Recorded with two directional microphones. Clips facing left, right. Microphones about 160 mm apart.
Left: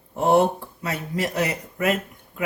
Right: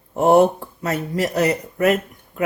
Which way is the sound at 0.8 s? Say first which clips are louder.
Right 5 dB; 40° right (ahead or behind).